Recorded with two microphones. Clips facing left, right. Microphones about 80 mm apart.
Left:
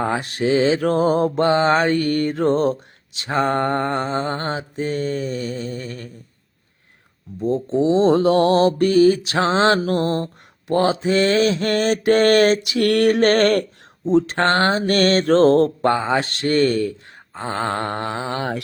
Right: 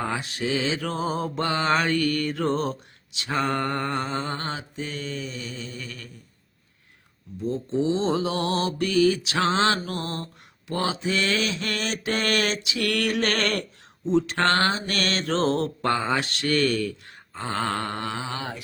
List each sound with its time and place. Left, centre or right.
0.2 s mantra: left
1.5 s mantra: left
7.3 s mantra: left
8.0 s mantra: left
9.7 s mantra: left
14.8 s mantra: left
15.9 s speech: left
16.2 s mantra: left